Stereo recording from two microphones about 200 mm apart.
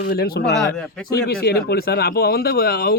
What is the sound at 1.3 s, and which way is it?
A man's voice, 50° left (ahead or behind).